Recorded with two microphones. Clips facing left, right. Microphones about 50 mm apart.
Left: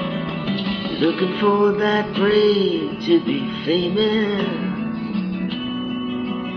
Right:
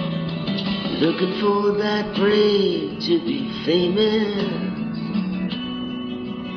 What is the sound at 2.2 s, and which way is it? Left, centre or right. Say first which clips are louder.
Music: even; centre.